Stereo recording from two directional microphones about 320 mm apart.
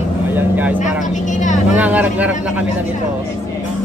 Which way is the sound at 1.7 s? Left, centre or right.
Centre.